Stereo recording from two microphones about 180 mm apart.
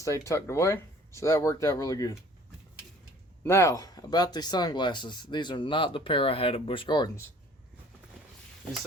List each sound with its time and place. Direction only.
0.0 s speech: 15° left (ahead or behind)
3.4 s speech: 15° left (ahead or behind)